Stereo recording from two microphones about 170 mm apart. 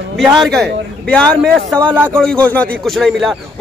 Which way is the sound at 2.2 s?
5° left (ahead or behind).